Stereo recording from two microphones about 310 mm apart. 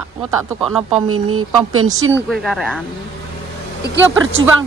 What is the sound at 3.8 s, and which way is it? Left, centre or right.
Speech, right.